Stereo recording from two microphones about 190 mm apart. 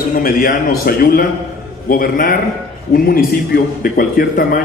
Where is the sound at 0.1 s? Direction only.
50° left (ahead or behind).